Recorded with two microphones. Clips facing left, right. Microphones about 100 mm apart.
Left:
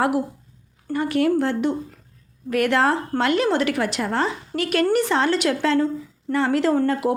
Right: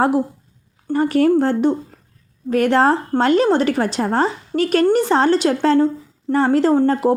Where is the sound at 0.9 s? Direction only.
35° right (ahead or behind).